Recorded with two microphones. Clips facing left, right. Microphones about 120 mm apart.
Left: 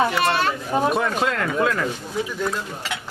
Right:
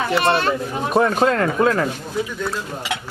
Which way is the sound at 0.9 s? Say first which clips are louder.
Right 6 dB; 40° right (ahead or behind).